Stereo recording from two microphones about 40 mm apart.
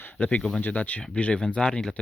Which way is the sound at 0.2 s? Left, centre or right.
Left.